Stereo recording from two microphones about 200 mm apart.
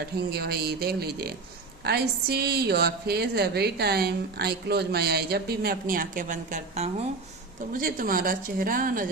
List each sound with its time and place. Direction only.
0.0 s a woman's voice: 55° right (ahead or behind)